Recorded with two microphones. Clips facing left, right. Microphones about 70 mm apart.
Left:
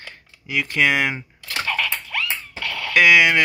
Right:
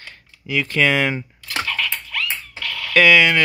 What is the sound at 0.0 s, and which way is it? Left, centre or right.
Speech, centre.